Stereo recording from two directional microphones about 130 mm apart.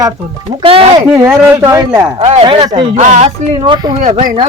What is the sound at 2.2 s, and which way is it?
Speech, 55° right (ahead or behind).